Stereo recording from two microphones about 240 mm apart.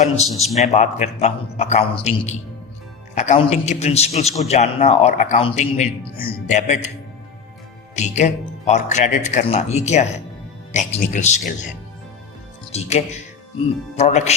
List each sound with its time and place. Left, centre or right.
0.3 s a man's voice: centre
0.5 s a man's voice: left
7.9 s a man's voice: left
12.7 s a man's voice: left